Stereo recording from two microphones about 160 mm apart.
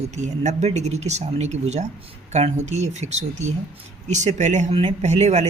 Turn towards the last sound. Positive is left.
turn(degrees=-45)  # may be behind; listen again after turning